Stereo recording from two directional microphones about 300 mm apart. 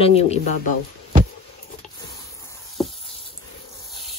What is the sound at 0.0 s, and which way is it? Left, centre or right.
Speech, centre.